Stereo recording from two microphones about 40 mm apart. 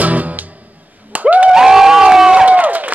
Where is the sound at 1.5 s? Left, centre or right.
Centre.